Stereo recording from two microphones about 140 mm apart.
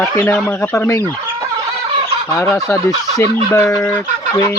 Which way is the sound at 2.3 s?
20° left (ahead or behind).